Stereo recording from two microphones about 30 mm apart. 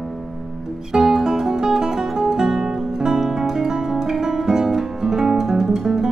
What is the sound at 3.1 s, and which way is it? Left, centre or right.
Guitar, centre.